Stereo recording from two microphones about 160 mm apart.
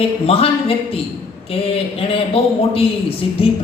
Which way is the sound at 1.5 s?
35° left (ahead or behind).